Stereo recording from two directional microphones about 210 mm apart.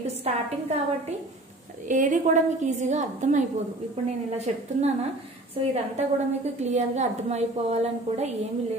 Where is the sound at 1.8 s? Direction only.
35° right (ahead or behind).